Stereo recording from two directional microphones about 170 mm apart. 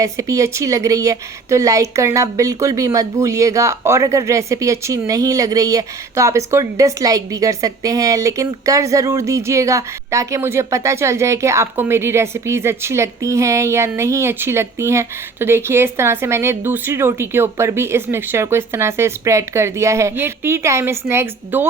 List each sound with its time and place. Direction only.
0.0 s a woman's voice: 20° right (ahead or behind)